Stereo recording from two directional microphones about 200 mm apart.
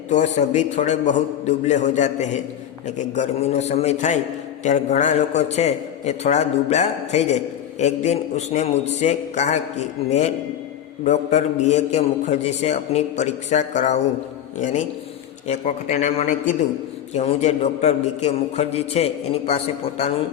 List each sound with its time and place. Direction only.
0.1 s a man's voice: 35° left (ahead or behind)